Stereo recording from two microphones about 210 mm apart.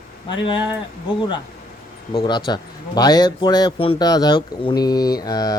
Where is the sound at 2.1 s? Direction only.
20° left (ahead or behind).